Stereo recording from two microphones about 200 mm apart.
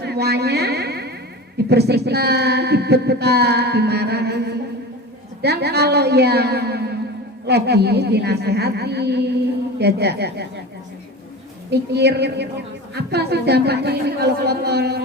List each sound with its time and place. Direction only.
0.0 s music: 55° right (ahead or behind)
1.7 s a woman's voice: 55° right (ahead or behind)
11.7 s a woman's voice: 55° right (ahead or behind)